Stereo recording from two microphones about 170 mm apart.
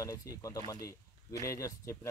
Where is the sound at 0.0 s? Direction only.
20° left (ahead or behind).